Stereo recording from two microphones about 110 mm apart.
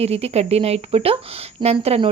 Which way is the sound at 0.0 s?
70° right (ahead or behind).